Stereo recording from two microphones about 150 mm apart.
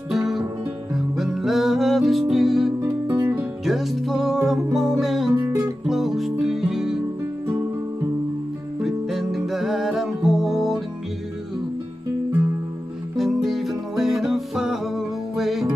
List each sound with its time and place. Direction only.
0.1 s music: centre (ahead or behind)
2.8 s music: 15° right (ahead or behind)
3.6 s music: centre (ahead or behind)
5.3 s music: 15° right (ahead or behind)
5.6 s music: centre (ahead or behind)
8.8 s music: centre (ahead or behind)
13.1 s music: centre (ahead or behind)